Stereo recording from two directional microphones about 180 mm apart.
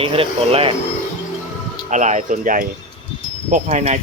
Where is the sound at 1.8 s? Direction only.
40° right (ahead or behind).